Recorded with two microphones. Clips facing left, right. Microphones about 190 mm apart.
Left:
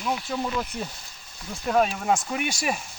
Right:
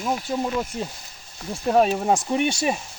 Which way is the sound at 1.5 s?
35° right (ahead or behind).